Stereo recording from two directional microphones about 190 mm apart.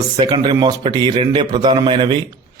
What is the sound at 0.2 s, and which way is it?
A man's voice, 25° right (ahead or behind).